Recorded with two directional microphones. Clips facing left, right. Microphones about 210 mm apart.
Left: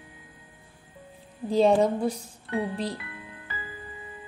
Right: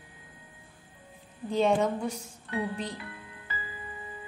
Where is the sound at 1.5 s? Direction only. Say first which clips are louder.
Left 5 dB; 35° left (ahead or behind).